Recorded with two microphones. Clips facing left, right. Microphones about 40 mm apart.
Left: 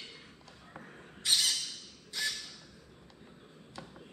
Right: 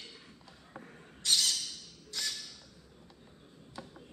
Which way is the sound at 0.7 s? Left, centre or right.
Centre.